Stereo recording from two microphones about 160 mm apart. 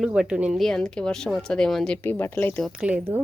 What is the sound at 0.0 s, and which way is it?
Speech, 5° right (ahead or behind).